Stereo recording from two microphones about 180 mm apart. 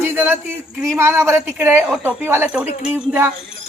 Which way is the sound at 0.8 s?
15° right (ahead or behind).